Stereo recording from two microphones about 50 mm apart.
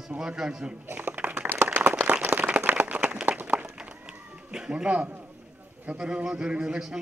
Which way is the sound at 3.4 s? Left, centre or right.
Right.